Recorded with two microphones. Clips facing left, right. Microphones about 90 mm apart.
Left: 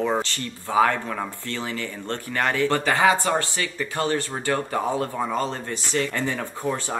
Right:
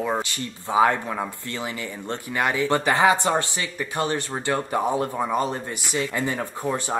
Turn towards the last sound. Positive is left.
turn(degrees=-15)  # may be behind; listen again after turning